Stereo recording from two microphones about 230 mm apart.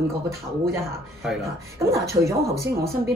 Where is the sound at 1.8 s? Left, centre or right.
Centre.